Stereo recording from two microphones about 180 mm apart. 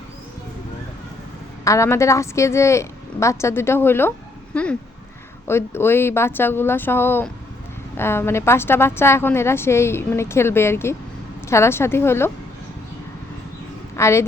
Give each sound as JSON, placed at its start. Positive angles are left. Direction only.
{"t": 1.6, "sound": "a woman's voice", "side_deg": 15}
{"t": 4.5, "sound": "a sound", "side_deg": 5}
{"t": 5.5, "sound": "a woman's voice", "side_deg": 15}
{"t": 13.9, "sound": "a woman's voice", "side_deg": 15}